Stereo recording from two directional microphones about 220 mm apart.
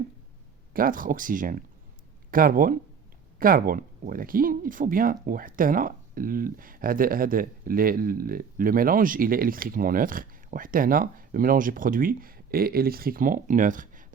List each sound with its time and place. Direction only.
0.7 s speech: 40° right (ahead or behind)